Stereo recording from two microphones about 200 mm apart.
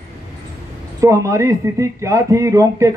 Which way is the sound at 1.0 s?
15° right (ahead or behind).